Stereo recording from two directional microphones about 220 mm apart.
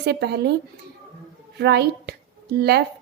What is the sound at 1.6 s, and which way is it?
A woman's voice, 50° right (ahead or behind).